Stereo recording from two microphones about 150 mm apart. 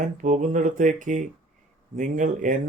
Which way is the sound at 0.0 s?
55° right (ahead or behind).